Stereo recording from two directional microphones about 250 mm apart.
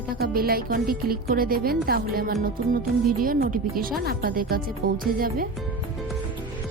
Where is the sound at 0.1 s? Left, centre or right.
Right.